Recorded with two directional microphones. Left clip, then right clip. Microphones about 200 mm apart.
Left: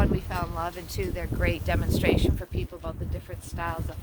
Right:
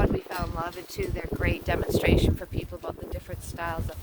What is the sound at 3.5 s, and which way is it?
Speech, 35° right (ahead or behind).